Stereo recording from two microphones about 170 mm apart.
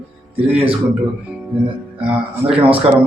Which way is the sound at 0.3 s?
35° right (ahead or behind).